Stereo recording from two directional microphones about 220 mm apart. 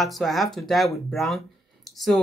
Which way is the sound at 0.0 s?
Centre (ahead or behind).